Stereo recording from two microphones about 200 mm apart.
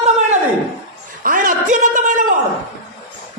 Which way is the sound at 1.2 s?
40° right (ahead or behind).